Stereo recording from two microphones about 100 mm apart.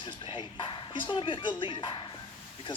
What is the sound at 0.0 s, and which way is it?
Speech, 55° left (ahead or behind).